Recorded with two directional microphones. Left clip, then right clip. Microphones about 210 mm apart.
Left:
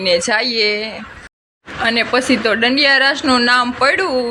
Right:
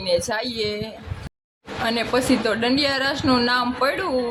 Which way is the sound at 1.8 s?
15° left (ahead or behind).